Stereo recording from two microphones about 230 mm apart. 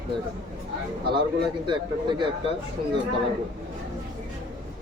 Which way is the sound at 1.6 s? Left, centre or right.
Centre.